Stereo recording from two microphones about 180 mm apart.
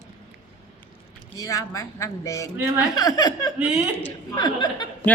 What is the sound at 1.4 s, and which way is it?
Speech, 20° left (ahead or behind).